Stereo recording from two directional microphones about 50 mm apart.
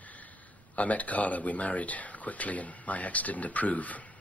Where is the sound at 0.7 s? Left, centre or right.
Left.